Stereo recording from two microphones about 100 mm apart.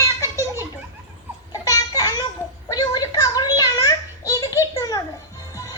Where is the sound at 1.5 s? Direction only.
40° left (ahead or behind).